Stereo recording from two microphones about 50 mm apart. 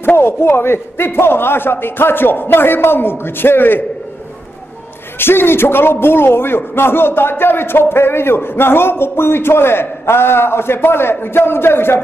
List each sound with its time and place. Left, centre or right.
0.0 s a man's voice: left
5.2 s a man's voice: left